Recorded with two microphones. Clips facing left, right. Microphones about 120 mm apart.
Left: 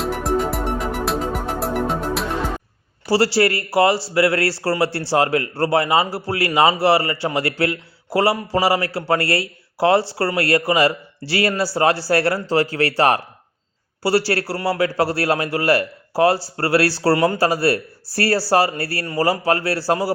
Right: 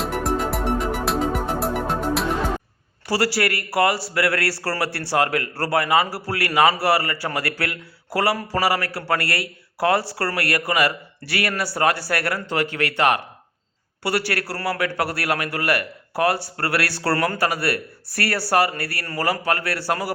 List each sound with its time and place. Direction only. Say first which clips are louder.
0.0 s music: left 2 dB; centre (ahead or behind)
3.1 s a man's voice: left 5 dB; 25° left (ahead or behind)